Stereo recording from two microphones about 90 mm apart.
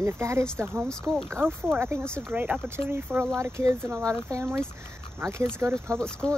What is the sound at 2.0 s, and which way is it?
Speech, 10° left (ahead or behind).